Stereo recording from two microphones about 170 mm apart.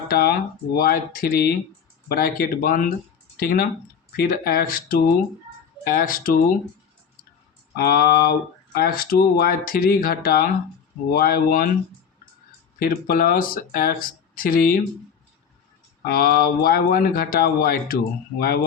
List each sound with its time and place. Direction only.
0.1 s speech: 65° left (ahead or behind)
7.8 s speech: 65° left (ahead or behind)
12.8 s speech: 60° left (ahead or behind)
16.0 s speech: 60° left (ahead or behind)